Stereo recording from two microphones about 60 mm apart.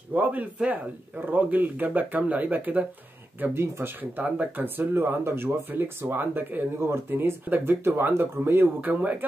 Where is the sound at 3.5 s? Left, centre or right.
Right.